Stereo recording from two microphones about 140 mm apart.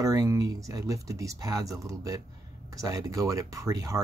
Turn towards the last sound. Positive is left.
turn(degrees=-25)  # may be behind; listen again after turning